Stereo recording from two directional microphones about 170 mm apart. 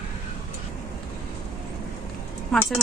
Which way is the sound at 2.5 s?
5° left (ahead or behind).